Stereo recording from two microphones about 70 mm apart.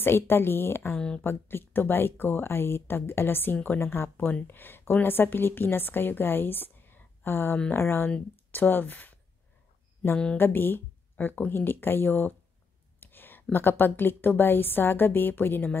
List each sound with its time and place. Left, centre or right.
0.0 s speech: left
0.9 s speech: centre
1.2 s a woman's voice: left
10.3 s a woman's voice: left